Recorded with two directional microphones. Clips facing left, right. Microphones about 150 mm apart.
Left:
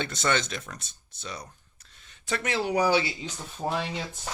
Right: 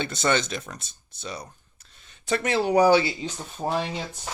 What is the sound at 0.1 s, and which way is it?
Speech, 25° right (ahead or behind).